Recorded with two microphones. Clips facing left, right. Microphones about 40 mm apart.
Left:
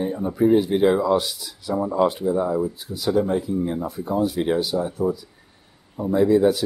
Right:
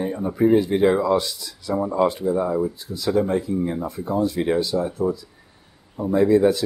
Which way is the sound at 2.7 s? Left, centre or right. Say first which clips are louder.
Even; centre.